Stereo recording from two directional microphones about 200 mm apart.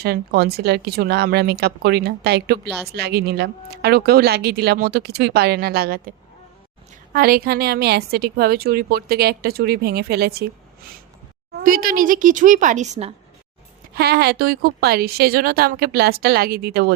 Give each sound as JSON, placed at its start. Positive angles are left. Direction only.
{"t": 0.0, "sound": "speech", "side_deg": -50}
{"t": 11.6, "sound": "a woman's voice", "side_deg": -45}
{"t": 13.9, "sound": "speech", "side_deg": -55}